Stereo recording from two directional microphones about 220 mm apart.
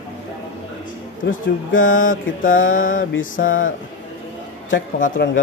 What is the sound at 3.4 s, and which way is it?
Speech, 50° left (ahead or behind).